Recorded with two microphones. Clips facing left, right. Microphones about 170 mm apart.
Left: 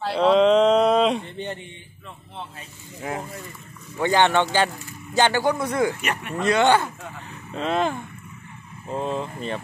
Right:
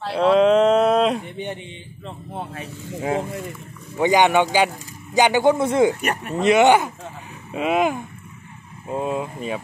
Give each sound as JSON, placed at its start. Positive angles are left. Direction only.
{"t": 0.0, "sound": "a sound", "side_deg": 0}
{"t": 1.2, "sound": "speech", "side_deg": -15}
{"t": 3.9, "sound": "speech", "side_deg": -15}